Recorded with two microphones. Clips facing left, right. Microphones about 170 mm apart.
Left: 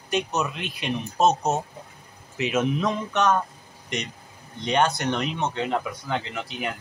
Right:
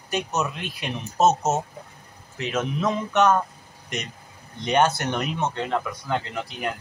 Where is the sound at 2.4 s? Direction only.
10° left (ahead or behind).